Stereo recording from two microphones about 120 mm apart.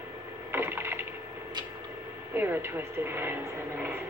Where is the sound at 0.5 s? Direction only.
20° right (ahead or behind).